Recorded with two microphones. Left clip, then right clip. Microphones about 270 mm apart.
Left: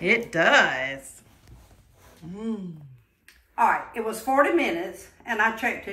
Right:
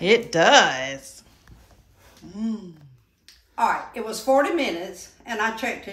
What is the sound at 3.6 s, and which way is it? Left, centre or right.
A woman's voice, centre.